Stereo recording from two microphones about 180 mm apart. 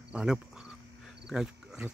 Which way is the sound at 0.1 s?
5° right (ahead or behind).